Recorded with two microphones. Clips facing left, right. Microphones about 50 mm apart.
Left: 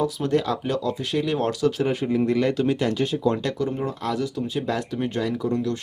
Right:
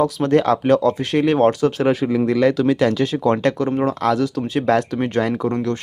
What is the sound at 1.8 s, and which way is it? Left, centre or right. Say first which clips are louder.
Speech: right 5 dB; right.